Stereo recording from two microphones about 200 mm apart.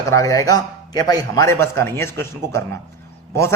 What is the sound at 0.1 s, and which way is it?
A man's voice, 15° left (ahead or behind).